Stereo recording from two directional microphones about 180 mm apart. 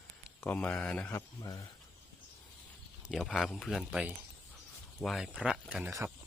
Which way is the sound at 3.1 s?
Centre (ahead or behind).